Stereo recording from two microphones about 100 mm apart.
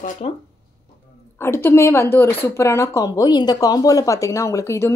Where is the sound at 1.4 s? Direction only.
25° left (ahead or behind).